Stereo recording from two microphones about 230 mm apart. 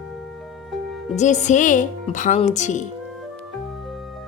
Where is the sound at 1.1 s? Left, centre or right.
Left.